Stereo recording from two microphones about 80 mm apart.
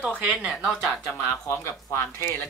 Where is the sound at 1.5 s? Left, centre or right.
Left.